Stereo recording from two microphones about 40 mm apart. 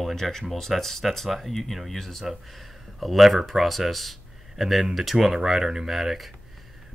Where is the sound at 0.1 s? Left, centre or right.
Centre.